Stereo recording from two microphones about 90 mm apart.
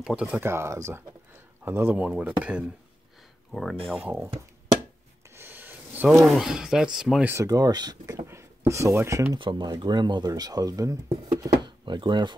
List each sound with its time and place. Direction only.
0.0 s speech: 10° right (ahead or behind)
0.4 s speech: 30° right (ahead or behind)
1.9 s speech: 15° right (ahead or behind)
3.5 s speech: 5° left (ahead or behind)
3.9 s speech: 15° right (ahead or behind)
5.3 s rub: 25° right (ahead or behind)
6.0 s speech: 5° right (ahead or behind)
7.4 s speech: 45° right (ahead or behind)
8.3 s speech: 30° right (ahead or behind)
9.4 s speech: 65° right (ahead or behind)
9.7 s speech: 55° right (ahead or behind); by 11.5 s 40° right (ahead or behind)
11.6 s speech: 60° right (ahead or behind)